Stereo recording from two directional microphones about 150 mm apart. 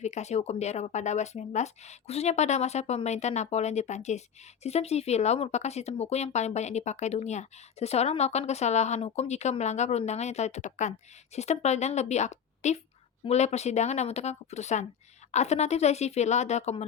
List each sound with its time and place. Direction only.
0.0 s speech: 50° left (ahead or behind)